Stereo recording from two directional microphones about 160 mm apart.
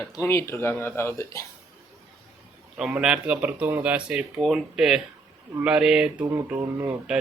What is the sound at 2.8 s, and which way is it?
Speech, 5° right (ahead or behind).